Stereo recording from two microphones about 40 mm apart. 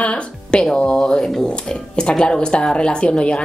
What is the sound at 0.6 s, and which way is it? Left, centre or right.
A woman's voice, centre.